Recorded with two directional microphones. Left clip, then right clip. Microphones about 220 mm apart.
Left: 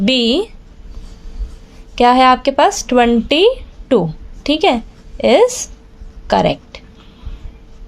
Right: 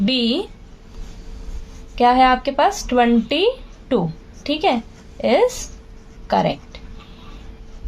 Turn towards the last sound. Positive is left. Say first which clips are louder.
# left 5 dB
turn(degrees=40)  # may be behind; listen again after turning